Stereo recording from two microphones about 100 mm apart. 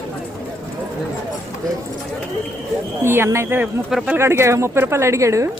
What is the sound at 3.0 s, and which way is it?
Speech, 25° right (ahead or behind).